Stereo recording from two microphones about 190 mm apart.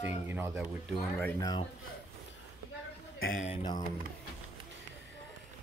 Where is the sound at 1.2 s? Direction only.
20° left (ahead or behind).